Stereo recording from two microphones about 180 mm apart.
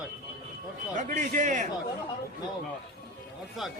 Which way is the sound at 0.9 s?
45° right (ahead or behind).